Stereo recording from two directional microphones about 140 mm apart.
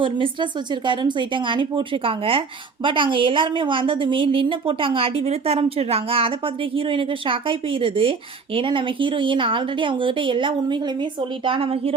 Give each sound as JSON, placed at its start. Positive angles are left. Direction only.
{"t": 0.0, "sound": "a woman's voice", "side_deg": -35}